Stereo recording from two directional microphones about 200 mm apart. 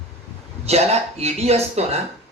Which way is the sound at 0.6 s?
30° right (ahead or behind).